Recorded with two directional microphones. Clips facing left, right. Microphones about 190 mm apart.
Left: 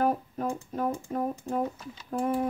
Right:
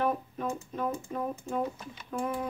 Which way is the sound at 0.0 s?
40° left (ahead or behind).